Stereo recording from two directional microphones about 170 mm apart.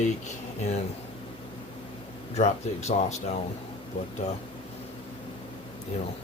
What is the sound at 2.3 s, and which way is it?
Speech, 40° left (ahead or behind).